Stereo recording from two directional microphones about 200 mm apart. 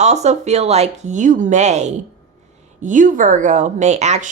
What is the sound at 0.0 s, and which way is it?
Speech, 35° right (ahead or behind).